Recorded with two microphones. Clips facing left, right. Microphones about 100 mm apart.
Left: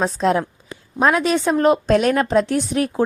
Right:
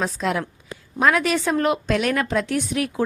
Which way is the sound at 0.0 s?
30° left (ahead or behind).